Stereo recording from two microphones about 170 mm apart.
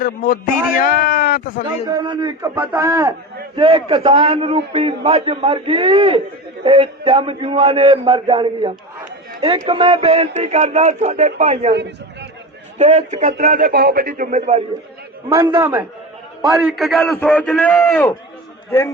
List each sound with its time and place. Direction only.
0.0 s speech: 55° left (ahead or behind)
1.9 s a man's voice: 25° right (ahead or behind)
3.5 s a man's voice: 30° right (ahead or behind)
12.8 s speech: 45° right (ahead or behind)
15.3 s a man's voice: 25° right (ahead or behind)
15.6 s a man's voice: 10° right (ahead or behind)
17.0 s a man's voice: 10° left (ahead or behind)